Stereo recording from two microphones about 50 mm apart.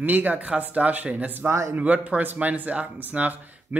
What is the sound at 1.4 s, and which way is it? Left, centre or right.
Speech, right.